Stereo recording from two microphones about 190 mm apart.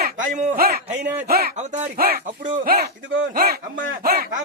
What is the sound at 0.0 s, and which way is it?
Speech, 45° right (ahead or behind).